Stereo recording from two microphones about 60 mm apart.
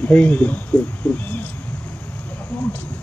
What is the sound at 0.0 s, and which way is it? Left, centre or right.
Speech, left.